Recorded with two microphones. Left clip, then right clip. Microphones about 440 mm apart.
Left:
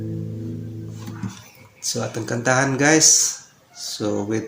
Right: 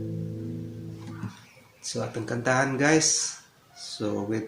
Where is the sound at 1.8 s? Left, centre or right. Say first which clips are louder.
Left 6 dB; right.